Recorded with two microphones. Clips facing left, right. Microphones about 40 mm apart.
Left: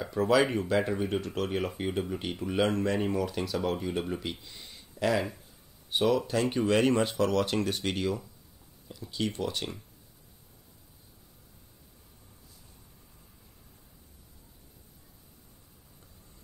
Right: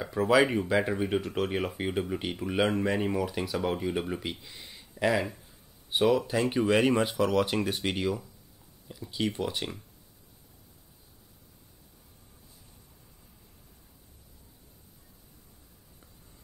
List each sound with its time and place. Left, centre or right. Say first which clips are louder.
0.0 s speech: right 1 dB; centre